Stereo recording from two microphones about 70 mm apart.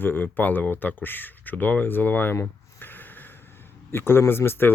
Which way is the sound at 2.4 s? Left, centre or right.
Left.